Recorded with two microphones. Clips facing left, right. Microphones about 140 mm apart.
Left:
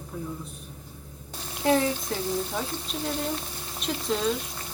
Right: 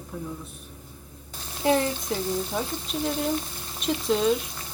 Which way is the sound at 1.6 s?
Centre (ahead or behind).